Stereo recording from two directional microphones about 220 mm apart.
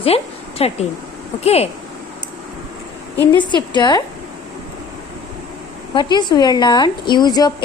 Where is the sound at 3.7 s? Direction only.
20° left (ahead or behind).